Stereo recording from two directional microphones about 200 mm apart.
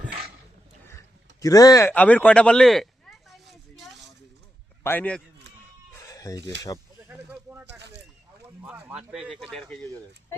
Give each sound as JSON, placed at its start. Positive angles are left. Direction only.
{"t": 1.4, "sound": "speech", "side_deg": 15}
{"t": 4.8, "sound": "a man's voice", "side_deg": 10}
{"t": 5.9, "sound": "chicken", "side_deg": 15}
{"t": 6.7, "sound": "speech", "side_deg": 20}
{"t": 7.1, "sound": "speech", "side_deg": -10}
{"t": 7.8, "sound": "speech", "side_deg": -60}
{"t": 8.6, "sound": "speech", "side_deg": -5}